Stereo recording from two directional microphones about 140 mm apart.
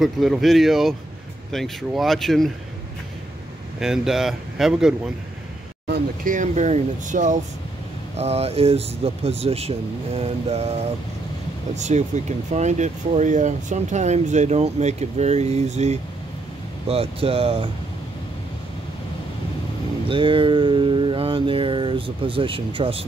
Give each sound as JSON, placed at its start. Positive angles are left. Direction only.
{"t": 0.0, "sound": "speech", "side_deg": 0}
{"t": 3.8, "sound": "speech", "side_deg": -5}
{"t": 6.2, "sound": "speech", "side_deg": -65}
{"t": 8.2, "sound": "speech", "side_deg": -50}
{"t": 16.8, "sound": "speech", "side_deg": -45}
{"t": 20.1, "sound": "a sound", "side_deg": -40}